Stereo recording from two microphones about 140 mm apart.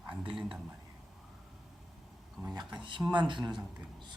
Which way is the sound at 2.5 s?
35° right (ahead or behind).